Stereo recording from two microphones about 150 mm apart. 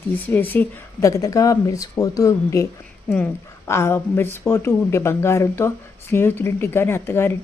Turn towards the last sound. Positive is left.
turn(degrees=15)  # may be behind; listen again after turning